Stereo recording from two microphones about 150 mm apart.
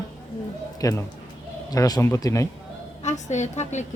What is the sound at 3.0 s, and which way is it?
Speech, 50° left (ahead or behind).